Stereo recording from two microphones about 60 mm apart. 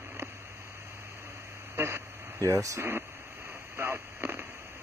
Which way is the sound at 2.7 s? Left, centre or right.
Right.